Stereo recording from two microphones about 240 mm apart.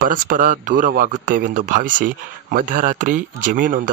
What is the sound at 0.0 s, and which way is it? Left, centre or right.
Speech, right.